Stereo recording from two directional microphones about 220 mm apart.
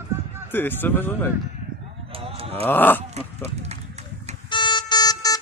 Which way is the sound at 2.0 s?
25° right (ahead or behind).